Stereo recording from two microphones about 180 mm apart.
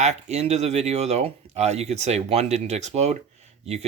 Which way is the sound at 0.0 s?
40° right (ahead or behind).